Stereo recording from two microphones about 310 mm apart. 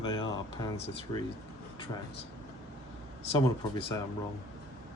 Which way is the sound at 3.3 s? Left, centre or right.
Centre.